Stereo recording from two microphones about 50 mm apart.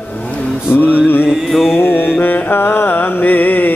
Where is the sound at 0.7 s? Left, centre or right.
Left.